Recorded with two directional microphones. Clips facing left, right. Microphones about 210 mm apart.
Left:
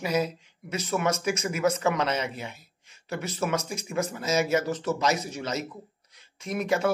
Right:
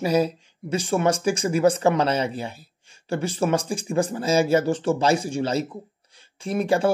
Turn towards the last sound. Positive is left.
turn(degrees=-30)  # may be behind; listen again after turning